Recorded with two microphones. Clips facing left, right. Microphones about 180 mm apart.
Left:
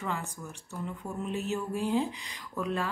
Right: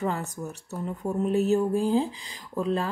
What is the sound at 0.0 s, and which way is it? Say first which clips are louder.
Speech: right 6 dB; 40° right (ahead or behind).